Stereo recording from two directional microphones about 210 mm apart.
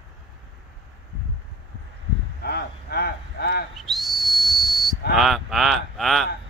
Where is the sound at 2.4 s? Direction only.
50° left (ahead or behind).